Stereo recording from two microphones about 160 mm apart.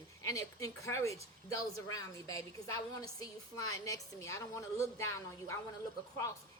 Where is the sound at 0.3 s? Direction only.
20° left (ahead or behind).